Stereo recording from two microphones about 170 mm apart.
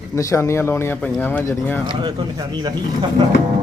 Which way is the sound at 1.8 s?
25° right (ahead or behind).